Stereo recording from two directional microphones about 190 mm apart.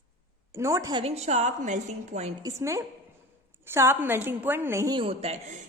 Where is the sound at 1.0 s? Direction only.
35° right (ahead or behind).